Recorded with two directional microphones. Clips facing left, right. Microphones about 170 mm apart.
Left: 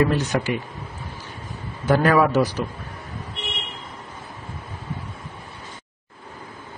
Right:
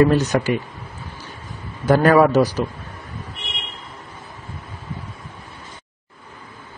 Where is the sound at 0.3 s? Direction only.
50° right (ahead or behind).